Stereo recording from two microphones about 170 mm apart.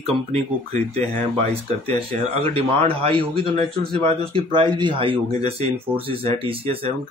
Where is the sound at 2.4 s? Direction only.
35° right (ahead or behind).